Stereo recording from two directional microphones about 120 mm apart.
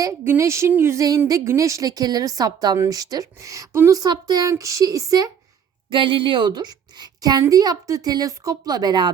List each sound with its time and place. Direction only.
0.0 s a woman's voice: 25° right (ahead or behind)
5.9 s a woman's voice: 45° right (ahead or behind)